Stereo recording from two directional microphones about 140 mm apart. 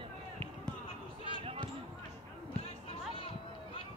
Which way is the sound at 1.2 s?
40° right (ahead or behind).